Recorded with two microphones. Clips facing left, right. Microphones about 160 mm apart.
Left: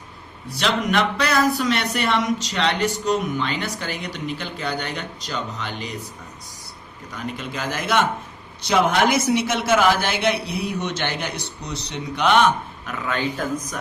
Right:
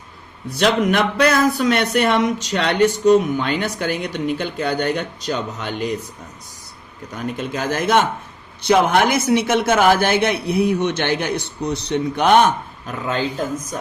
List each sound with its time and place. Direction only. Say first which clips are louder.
0.6 s speech: right 4 dB; 50° right (ahead or behind)
7.3 s speech: right 7 dB; 50° right (ahead or behind)
12.8 s speech: right 3 dB; 30° right (ahead or behind)